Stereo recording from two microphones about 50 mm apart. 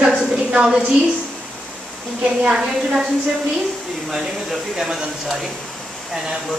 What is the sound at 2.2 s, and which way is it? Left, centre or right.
Speech, centre.